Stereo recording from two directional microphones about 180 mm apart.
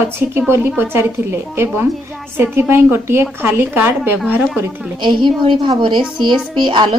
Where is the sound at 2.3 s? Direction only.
10° right (ahead or behind).